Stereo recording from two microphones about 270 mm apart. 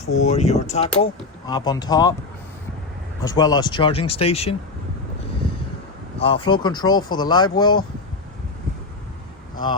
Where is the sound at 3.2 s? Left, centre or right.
Centre.